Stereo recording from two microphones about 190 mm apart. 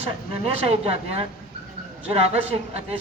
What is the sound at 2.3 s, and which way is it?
Speech, 30° right (ahead or behind).